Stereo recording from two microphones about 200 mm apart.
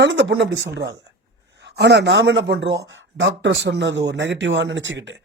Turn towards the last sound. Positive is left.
turn(degrees=-65)  # may be behind; listen again after turning